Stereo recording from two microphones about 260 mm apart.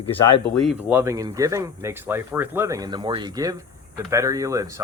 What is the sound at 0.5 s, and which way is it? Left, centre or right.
Speech, centre.